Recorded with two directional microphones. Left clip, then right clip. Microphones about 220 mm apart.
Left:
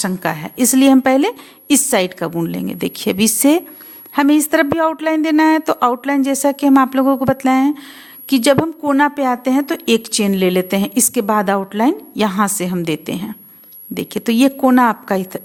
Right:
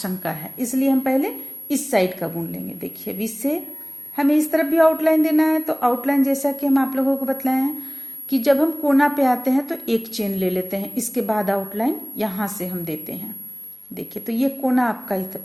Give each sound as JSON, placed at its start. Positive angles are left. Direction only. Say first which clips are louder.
{"t": 0.0, "sound": "a woman's voice", "louder": "left 8 dB", "side_deg": 30}